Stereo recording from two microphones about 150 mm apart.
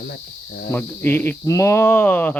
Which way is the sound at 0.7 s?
15° left (ahead or behind).